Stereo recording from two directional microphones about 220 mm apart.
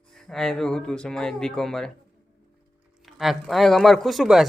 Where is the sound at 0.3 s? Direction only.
Centre (ahead or behind).